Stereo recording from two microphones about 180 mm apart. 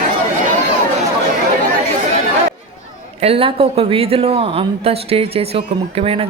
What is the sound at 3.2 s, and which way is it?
Speech, 30° right (ahead or behind).